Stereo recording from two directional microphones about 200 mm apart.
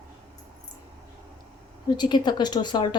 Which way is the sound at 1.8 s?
20° left (ahead or behind).